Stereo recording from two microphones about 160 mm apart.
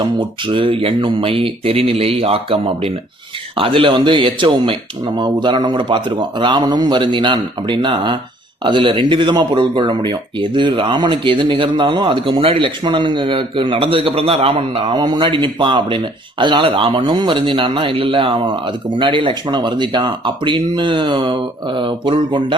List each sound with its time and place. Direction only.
0.0 s speech: 30° right (ahead or behind)